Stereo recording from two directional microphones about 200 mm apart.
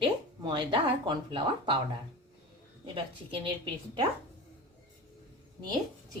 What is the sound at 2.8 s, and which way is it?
Speech, 25° right (ahead or behind).